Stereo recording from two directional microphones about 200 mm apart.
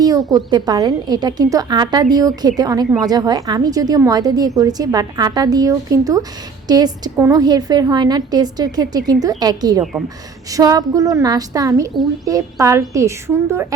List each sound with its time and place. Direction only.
0.0 s a woman's voice: 20° right (ahead or behind)